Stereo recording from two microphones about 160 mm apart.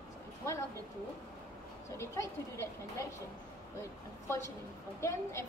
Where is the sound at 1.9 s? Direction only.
20° left (ahead or behind).